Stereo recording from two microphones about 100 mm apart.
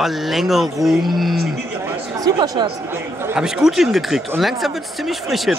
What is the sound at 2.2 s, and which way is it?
Speech, 40° right (ahead or behind).